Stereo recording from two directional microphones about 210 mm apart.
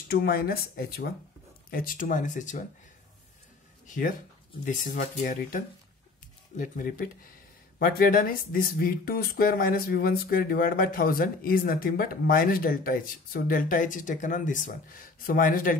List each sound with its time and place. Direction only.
0.1 s speech: 45° left (ahead or behind)
3.8 s speech: 40° left (ahead or behind)